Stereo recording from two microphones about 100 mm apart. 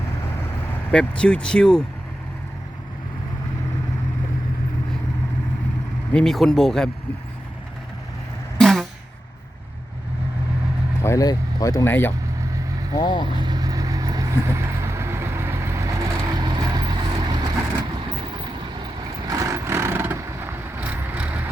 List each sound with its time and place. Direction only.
0.9 s speech: 10° left (ahead or behind)
6.1 s speech: 5° left (ahead or behind)
8.5 s a sound: centre (ahead or behind)
11.0 s speech: 30° left (ahead or behind)
11.9 s speech: 20° left (ahead or behind)
13.0 s speech: 55° left (ahead or behind)
13.2 s vehicle: 50° right (ahead or behind)
19.0 s vehicle: 40° right (ahead or behind); by 21.5 s 15° right (ahead or behind)